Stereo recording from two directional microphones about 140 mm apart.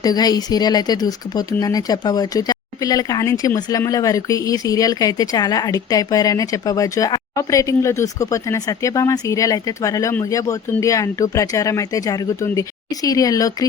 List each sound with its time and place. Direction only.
0.0 s speech: 30° left (ahead or behind)